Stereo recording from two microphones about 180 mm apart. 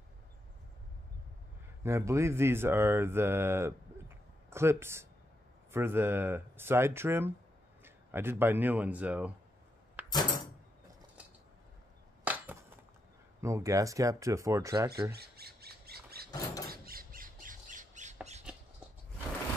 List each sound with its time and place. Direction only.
1.8 s speech: 15° right (ahead or behind)
10.1 s a sound: 25° left (ahead or behind)
12.3 s chop: 10° right (ahead or behind)
13.4 s speech: 15° right (ahead or behind)
15.1 s squawk: 60° right (ahead or behind)
16.3 s door: 20° left (ahead or behind)
16.6 s squawk: 55° right (ahead or behind)